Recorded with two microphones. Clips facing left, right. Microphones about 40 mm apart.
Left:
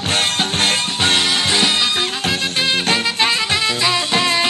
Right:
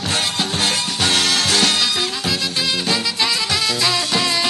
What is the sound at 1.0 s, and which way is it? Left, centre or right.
Music, left.